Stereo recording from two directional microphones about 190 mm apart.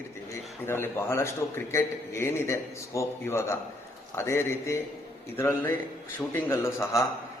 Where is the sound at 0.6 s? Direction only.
15° left (ahead or behind).